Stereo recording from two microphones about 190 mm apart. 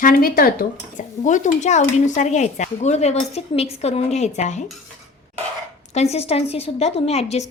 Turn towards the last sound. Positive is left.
turn(degrees=35)  # may be behind; listen again after turning